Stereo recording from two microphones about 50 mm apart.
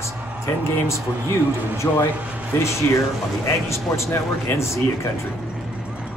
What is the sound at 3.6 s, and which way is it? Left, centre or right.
Speech, left.